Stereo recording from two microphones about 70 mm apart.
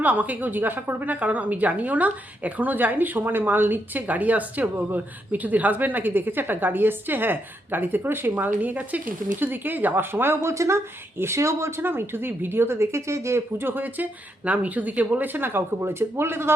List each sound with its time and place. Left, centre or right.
0.0 s a woman's voice: right
10.5 s speech: right